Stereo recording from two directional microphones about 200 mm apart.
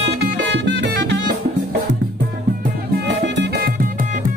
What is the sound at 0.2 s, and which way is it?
Music, 60° right (ahead or behind).